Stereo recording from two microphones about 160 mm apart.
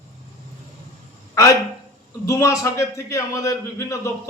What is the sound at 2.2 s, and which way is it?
A man's voice, 20° left (ahead or behind).